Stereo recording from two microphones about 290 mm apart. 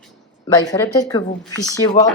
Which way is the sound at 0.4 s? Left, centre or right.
Centre.